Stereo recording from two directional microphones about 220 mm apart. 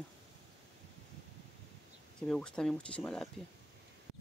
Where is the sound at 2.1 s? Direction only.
5° left (ahead or behind).